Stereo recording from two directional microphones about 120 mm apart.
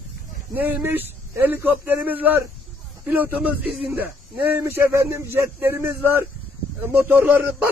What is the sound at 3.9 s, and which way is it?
A man's voice, 15° right (ahead or behind).